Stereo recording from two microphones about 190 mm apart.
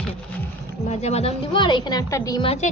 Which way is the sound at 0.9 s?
35° left (ahead or behind).